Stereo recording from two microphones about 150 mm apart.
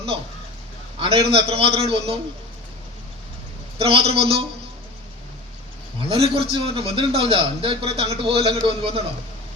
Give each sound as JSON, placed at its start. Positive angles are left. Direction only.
{"t": 0.9, "sound": "a man's voice", "side_deg": -40}
{"t": 3.8, "sound": "a man's voice", "side_deg": -40}
{"t": 6.0, "sound": "a man's voice", "side_deg": -40}